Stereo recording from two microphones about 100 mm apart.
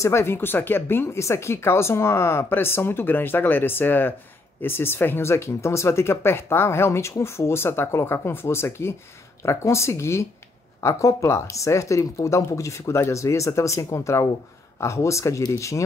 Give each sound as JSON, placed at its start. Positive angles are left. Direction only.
{"t": 0.0, "sound": "speech", "side_deg": 25}